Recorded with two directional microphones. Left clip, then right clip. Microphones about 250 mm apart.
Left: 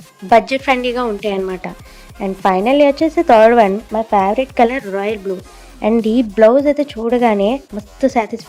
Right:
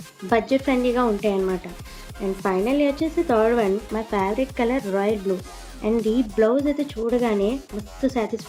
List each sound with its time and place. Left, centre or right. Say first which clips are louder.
0.3 s speech: left 9 dB; left
3.9 s speech: left 10 dB; left